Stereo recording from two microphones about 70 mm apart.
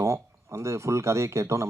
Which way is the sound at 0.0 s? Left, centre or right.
Right.